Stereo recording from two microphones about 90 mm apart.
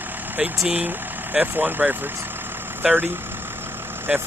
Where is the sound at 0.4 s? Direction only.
10° right (ahead or behind).